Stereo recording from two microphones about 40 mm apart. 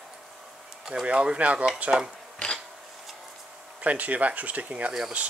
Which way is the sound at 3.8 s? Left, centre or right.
Right.